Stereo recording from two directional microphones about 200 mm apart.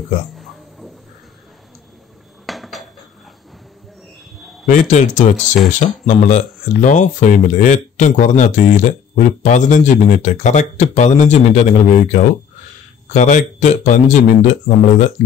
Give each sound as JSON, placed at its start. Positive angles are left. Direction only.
{"t": 0.4, "sound": "a sound", "side_deg": 0}
{"t": 2.4, "sound": "dishes", "side_deg": 0}
{"t": 4.6, "sound": "speech", "side_deg": 40}